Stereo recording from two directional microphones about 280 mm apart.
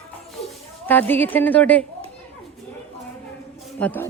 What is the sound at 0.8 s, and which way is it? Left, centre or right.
Speech, centre.